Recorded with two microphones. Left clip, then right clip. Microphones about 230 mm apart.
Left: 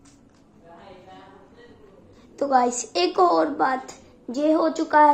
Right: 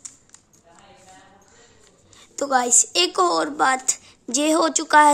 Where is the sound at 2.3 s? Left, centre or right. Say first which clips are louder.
Even; right.